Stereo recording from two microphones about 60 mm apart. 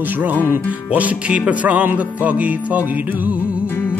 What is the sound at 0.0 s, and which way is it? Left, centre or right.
Music, right.